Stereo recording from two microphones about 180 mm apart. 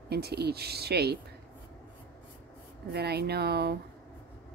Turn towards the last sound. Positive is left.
turn(degrees=-65)  # may be behind; listen again after turning